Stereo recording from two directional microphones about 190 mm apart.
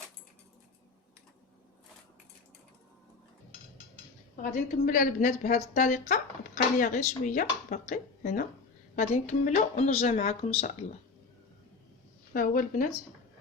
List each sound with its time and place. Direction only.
4.5 s speech: 45° left (ahead or behind)
12.3 s speech: 45° left (ahead or behind)